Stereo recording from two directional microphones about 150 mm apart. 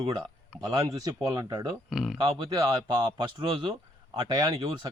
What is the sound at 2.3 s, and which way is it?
Speech, 30° right (ahead or behind).